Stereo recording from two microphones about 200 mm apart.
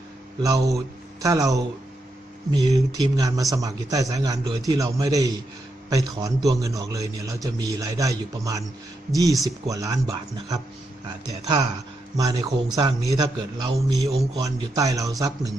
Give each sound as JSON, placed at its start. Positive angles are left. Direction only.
{"t": 0.4, "sound": "a man's voice", "side_deg": -15}